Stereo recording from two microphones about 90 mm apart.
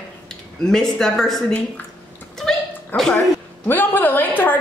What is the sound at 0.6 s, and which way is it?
Speech, 5° left (ahead or behind).